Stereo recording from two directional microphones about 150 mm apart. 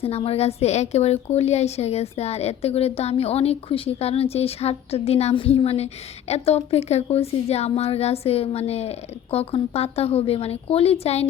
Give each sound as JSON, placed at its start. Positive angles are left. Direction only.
{"t": 0.0, "sound": "a woman's voice", "side_deg": 40}